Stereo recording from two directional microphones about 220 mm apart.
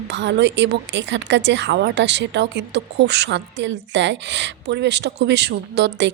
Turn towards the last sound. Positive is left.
turn(degrees=-50)  # may be behind; listen again after turning